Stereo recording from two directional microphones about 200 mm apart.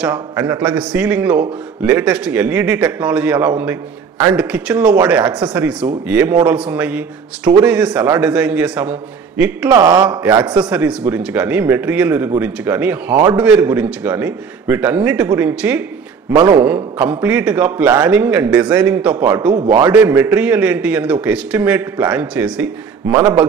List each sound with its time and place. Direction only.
0.4 s a man's voice: 10° right (ahead or behind)
9.7 s speech: 20° right (ahead or behind)
10.4 s a man's voice: 5° right (ahead or behind)